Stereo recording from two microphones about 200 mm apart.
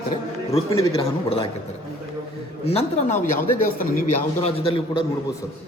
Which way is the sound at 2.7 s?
35° left (ahead or behind).